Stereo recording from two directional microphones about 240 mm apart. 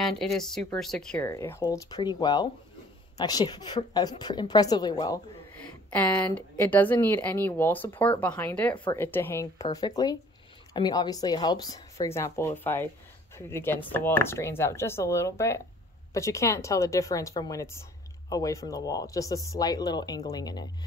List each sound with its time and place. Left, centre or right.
0.0 s speech: centre
1.1 s speech: centre